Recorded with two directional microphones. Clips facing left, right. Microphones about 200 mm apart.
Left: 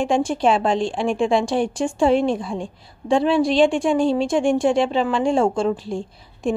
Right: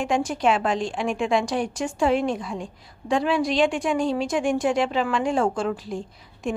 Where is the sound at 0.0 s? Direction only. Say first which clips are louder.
Left 4 dB; 30° left (ahead or behind).